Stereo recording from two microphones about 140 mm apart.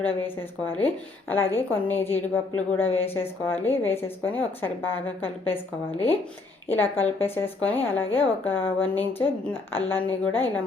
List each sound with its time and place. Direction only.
0.3 s a woman's voice: 15° left (ahead or behind)
6.7 s a woman's voice: 15° left (ahead or behind)